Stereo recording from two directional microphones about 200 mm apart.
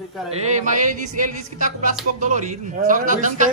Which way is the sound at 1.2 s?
40° right (ahead or behind).